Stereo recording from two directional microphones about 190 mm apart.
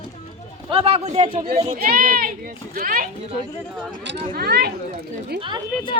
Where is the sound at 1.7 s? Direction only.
50° right (ahead or behind).